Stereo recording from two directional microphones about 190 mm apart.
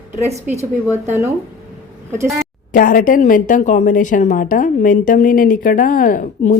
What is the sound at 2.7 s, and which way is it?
A woman's voice, 45° left (ahead or behind).